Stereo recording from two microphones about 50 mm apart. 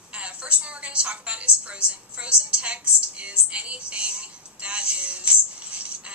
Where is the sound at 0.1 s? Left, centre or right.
Right.